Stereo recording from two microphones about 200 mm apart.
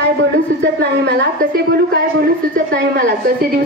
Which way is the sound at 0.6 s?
55° right (ahead or behind).